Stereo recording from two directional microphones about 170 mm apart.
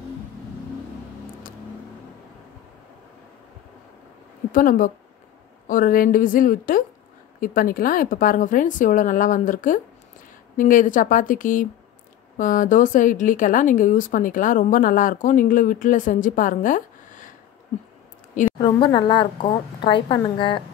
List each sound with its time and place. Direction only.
4.5 s a woman's voice: 55° left (ahead or behind)
18.6 s a woman's voice: 30° left (ahead or behind)